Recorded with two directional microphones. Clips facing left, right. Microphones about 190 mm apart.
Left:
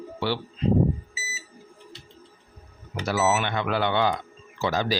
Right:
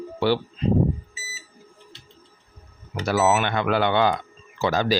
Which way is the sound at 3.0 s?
60° right (ahead or behind).